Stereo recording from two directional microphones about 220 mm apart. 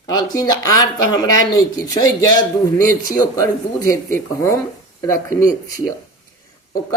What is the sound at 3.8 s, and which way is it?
Speech, 15° left (ahead or behind).